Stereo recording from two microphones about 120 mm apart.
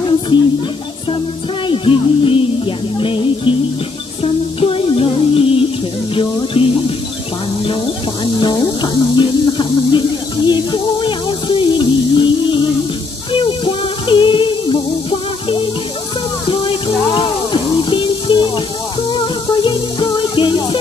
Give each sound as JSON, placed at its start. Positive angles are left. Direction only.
{"t": 1.7, "sound": "a sound", "side_deg": 50}
{"t": 3.0, "sound": "music", "side_deg": 45}
{"t": 8.4, "sound": "music", "side_deg": 40}